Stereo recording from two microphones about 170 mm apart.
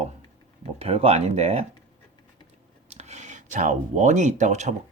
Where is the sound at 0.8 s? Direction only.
35° right (ahead or behind).